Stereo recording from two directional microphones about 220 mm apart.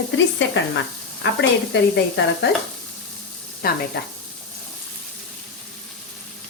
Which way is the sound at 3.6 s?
40° left (ahead or behind).